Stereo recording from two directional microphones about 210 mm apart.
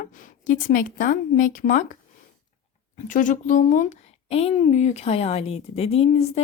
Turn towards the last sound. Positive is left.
turn(degrees=30)  # may be behind; listen again after turning